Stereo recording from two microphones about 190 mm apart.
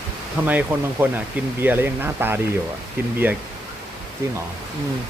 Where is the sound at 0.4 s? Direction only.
10° right (ahead or behind).